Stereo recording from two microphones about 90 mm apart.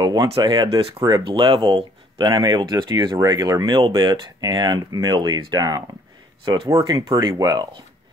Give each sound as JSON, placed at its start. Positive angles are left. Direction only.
{"t": 0.0, "sound": "speech", "side_deg": -50}
{"t": 1.2, "sound": "speech", "side_deg": -70}
{"t": 2.2, "sound": "speech", "side_deg": -50}
{"t": 3.3, "sound": "speech", "side_deg": -40}
{"t": 3.6, "sound": "speech", "side_deg": -60}
{"t": 6.4, "sound": "speech", "side_deg": -60}
{"t": 6.9, "sound": "speech", "side_deg": -45}